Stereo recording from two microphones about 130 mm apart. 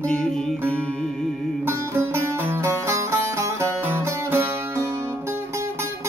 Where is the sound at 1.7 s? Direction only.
20° right (ahead or behind).